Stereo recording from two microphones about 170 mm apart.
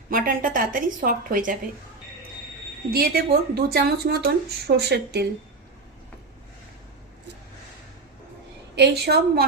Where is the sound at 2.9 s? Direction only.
65° right (ahead or behind).